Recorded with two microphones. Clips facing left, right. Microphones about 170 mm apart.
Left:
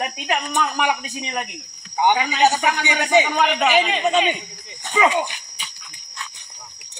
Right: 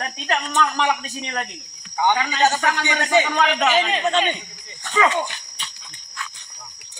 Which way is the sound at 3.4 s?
5° left (ahead or behind).